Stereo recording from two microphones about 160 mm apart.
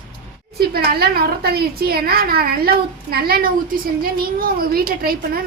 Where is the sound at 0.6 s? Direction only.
75° right (ahead or behind).